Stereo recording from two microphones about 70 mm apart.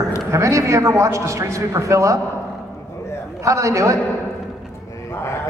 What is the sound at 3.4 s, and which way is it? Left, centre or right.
Speech, right.